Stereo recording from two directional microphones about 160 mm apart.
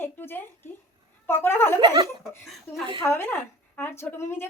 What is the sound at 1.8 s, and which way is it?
Giggle, 25° right (ahead or behind).